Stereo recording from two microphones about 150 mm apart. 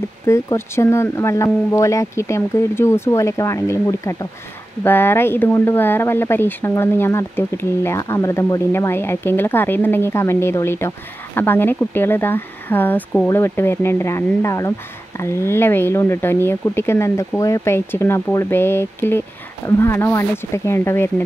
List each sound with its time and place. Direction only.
0.3 s speech: 20° left (ahead or behind)